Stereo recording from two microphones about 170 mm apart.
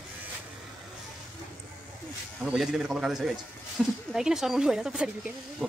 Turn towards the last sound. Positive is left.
turn(degrees=0)  # may be behind; listen again after turning